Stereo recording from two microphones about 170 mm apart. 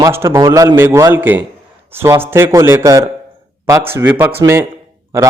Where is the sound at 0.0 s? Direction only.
15° right (ahead or behind).